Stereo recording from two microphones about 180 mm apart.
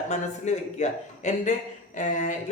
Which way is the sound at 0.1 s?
40° left (ahead or behind).